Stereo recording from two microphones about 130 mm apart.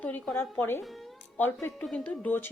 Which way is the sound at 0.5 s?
15° left (ahead or behind).